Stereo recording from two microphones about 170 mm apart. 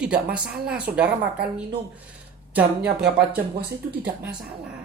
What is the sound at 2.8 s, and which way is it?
Music, 5° right (ahead or behind).